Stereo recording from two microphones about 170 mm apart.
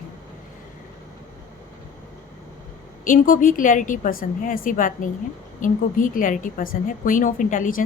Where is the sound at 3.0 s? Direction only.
50° left (ahead or behind).